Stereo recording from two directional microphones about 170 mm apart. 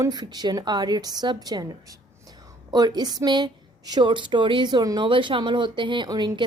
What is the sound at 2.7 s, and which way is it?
A woman's voice, 25° right (ahead or behind).